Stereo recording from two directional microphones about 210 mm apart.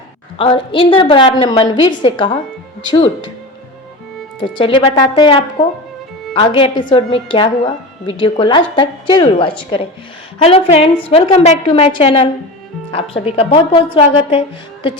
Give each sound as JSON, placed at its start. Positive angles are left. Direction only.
{"t": 0.3, "sound": "a woman's voice", "side_deg": 25}
{"t": 4.4, "sound": "a woman's voice", "side_deg": 25}